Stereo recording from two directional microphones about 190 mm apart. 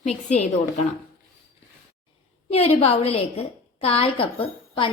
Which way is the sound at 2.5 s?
30° left (ahead or behind).